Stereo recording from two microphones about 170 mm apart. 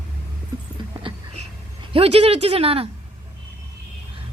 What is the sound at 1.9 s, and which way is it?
Speech, 35° right (ahead or behind).